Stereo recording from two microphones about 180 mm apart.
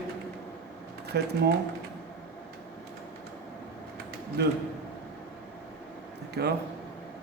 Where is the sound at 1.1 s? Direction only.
65° right (ahead or behind).